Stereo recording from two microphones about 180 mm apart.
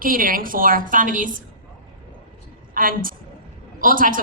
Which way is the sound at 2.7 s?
50° right (ahead or behind).